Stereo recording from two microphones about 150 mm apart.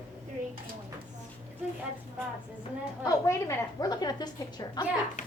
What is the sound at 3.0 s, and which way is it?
A woman's voice, 20° left (ahead or behind).